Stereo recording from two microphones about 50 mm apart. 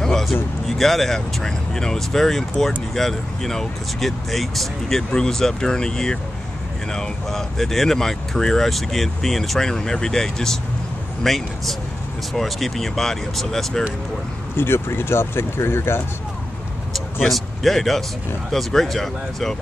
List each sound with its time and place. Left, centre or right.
0.0 s speech: centre
14.6 s speech: left
17.3 s speech: centre